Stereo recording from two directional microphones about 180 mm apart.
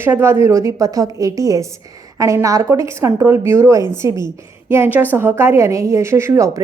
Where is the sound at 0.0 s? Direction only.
15° right (ahead or behind).